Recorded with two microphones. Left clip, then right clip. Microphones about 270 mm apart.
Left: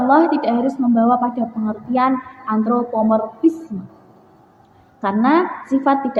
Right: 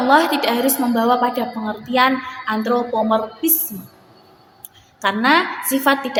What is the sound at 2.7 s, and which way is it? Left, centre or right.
Speech, right.